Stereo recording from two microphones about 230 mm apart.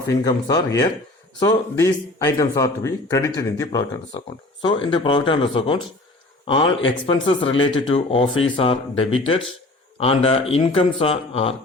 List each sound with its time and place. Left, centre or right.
0.3 s speech: centre